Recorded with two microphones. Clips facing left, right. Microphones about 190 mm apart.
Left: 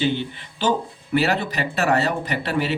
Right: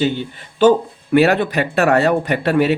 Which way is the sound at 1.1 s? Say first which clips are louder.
Right 8 dB; 55° right (ahead or behind).